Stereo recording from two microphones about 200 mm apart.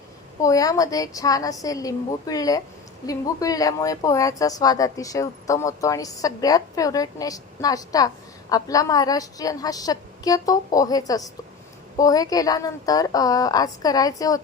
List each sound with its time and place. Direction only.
0.4 s a woman's voice: 15° left (ahead or behind)